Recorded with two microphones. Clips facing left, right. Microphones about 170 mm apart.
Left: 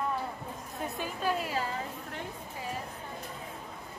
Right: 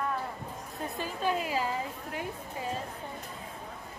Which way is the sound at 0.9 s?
Centre (ahead or behind).